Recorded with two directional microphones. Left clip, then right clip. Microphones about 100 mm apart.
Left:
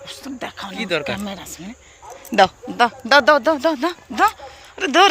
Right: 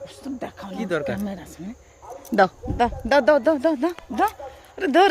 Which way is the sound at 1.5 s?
35° right (ahead or behind).